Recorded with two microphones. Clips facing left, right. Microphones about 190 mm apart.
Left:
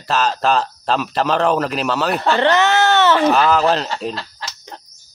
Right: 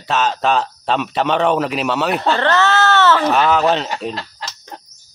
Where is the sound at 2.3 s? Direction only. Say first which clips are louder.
Left 3 dB; 15° left (ahead or behind).